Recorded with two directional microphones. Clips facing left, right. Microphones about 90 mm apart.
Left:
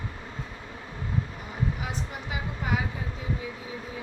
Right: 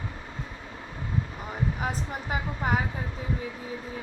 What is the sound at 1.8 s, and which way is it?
A woman's voice, 45° right (ahead or behind).